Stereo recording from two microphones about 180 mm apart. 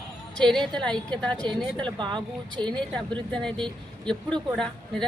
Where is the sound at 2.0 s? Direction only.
25° right (ahead or behind).